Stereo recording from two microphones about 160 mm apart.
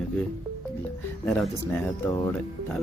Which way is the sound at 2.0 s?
15° left (ahead or behind).